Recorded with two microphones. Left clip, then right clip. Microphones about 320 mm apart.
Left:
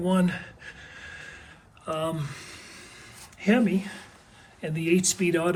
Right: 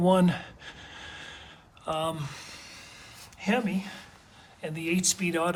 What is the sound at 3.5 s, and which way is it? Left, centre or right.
Speech, centre.